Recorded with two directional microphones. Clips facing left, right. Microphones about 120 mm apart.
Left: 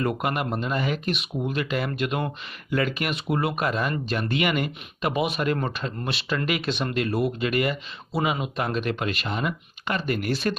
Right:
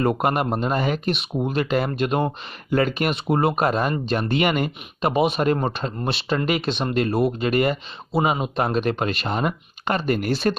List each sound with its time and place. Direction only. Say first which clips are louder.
0.0 s speech: right 5 dB; 40° right (ahead or behind)